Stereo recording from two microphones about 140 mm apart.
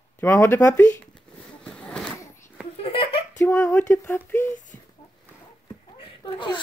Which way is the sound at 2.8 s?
40° left (ahead or behind).